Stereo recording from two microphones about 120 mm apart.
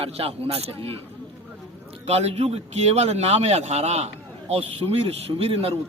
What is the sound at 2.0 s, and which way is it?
A man's voice, 60° right (ahead or behind).